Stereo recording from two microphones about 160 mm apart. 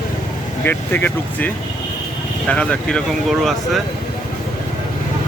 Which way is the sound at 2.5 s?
5° left (ahead or behind).